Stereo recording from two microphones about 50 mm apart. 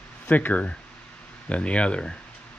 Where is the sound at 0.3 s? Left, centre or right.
Left.